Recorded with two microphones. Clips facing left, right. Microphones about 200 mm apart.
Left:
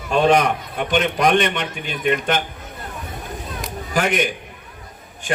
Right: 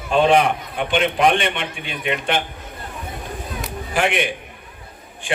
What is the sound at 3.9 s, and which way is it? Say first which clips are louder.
Speech: left 1 dB; 40° left (ahead or behind).